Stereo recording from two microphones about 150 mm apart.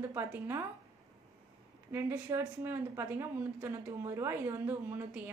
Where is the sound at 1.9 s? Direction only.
15° right (ahead or behind).